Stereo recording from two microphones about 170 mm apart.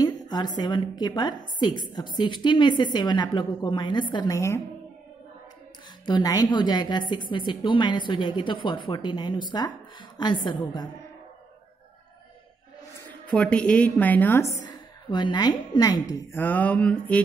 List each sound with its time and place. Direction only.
0.0 s a sound: 25° left (ahead or behind)
0.6 s a woman's voice: 25° left (ahead or behind)
6.0 s a woman's voice: 25° left (ahead or behind)
13.3 s a woman's voice: 5° left (ahead or behind)
14.7 s a woman's voice: 25° left (ahead or behind); by 17.2 s 5° left (ahead or behind)